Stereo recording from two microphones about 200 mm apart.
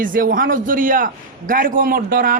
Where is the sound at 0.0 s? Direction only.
45° right (ahead or behind).